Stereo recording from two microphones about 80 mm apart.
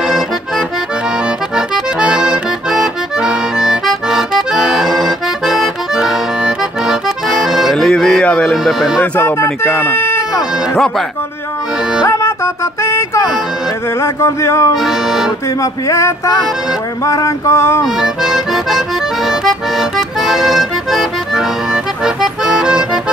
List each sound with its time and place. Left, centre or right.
2.0 s accordion: centre
8.5 s music: centre
9.2 s speech: left
12.1 s music: left
14.0 s a sound: left
14.8 s music: centre
15.6 s a sound: left
18.0 s music: centre
22.0 s accordion: centre